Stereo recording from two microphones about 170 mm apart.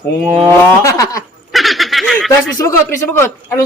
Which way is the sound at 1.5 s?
Centre (ahead or behind).